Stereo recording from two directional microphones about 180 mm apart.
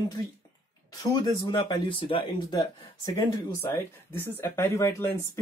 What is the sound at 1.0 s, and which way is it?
Speech, 20° left (ahead or behind).